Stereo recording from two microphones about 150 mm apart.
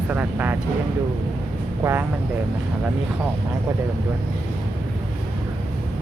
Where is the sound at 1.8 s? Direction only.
15° right (ahead or behind).